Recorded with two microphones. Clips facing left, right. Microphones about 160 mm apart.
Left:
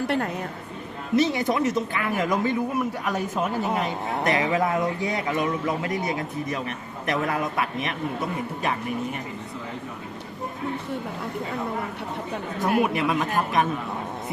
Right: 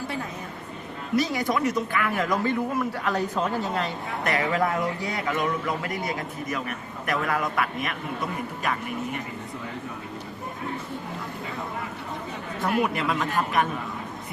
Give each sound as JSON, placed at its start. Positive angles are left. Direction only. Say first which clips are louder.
{"t": 1.1, "sound": "speech", "louder": "left 3 dB", "side_deg": 20}
{"t": 12.8, "sound": "speech", "louder": "left 2 dB", "side_deg": 20}